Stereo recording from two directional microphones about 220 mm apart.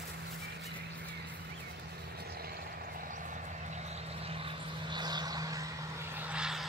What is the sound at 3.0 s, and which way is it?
Vehicle, 35° right (ahead or behind).